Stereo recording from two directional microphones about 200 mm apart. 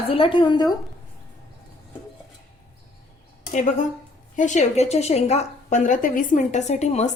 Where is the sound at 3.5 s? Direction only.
40° left (ahead or behind).